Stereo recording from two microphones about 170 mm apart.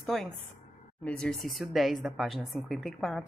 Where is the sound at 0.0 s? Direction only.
Centre (ahead or behind).